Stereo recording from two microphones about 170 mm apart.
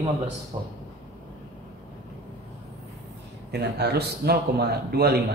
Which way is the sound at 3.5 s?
70° right (ahead or behind).